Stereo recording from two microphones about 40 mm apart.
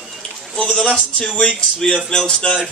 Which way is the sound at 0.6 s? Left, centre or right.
Centre.